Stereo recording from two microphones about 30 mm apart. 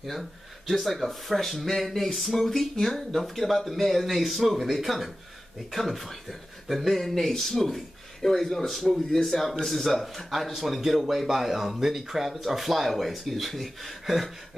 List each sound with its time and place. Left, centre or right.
0.0 s speech: centre
3.1 s speech: centre